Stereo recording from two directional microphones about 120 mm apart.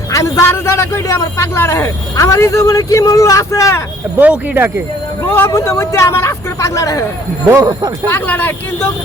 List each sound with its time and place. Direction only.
0.1 s a man's voice: 25° left (ahead or behind)
4.2 s speech: 15° right (ahead or behind)
5.2 s a man's voice: 20° left (ahead or behind)
7.4 s speech: 30° right (ahead or behind)
8.1 s speech: 15° left (ahead or behind)